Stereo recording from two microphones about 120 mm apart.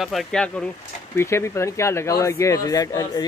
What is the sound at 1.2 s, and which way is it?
Speech, 20° left (ahead or behind).